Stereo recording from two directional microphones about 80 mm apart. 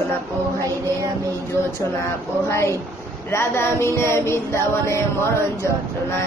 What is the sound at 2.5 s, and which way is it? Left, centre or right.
Female singing, left.